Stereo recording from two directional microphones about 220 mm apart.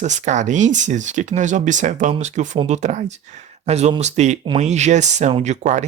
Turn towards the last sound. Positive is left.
turn(degrees=-30)  # may be behind; listen again after turning